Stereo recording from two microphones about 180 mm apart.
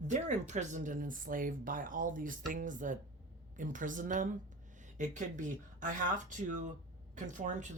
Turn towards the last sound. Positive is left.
turn(degrees=-45)  # may be behind; listen again after turning